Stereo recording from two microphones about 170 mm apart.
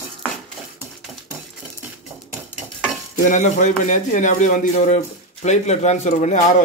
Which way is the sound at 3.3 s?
45° left (ahead or behind).